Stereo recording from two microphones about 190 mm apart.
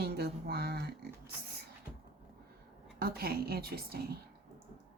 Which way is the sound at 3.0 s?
55° right (ahead or behind).